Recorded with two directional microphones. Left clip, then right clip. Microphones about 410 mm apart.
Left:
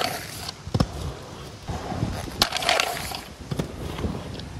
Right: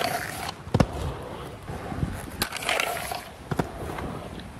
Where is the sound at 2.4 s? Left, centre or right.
Centre.